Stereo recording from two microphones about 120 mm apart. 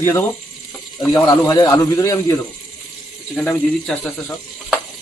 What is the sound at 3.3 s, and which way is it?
Speech, 10° left (ahead or behind).